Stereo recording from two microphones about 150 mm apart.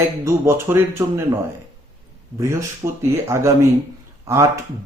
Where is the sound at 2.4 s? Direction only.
20° right (ahead or behind).